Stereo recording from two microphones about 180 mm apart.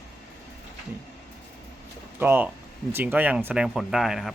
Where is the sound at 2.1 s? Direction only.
10° right (ahead or behind).